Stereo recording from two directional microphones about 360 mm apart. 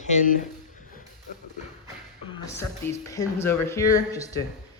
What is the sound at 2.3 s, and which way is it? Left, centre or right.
Speech, centre.